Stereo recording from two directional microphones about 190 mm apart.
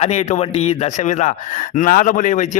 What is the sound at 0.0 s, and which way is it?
A man's voice, 35° left (ahead or behind).